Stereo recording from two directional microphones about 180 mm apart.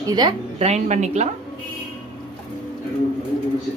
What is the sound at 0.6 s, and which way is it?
Speech, 40° right (ahead or behind).